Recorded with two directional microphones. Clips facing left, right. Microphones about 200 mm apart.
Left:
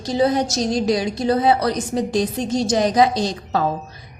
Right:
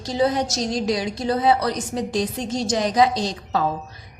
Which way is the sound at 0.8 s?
40° left (ahead or behind).